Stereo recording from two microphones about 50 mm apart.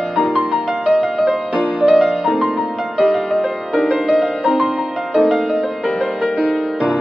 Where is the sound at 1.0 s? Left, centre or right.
Centre.